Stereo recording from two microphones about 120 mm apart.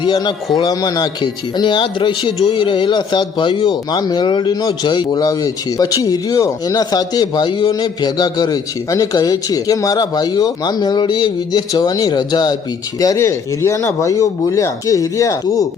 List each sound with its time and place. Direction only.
0.0 s speech: 40° left (ahead or behind)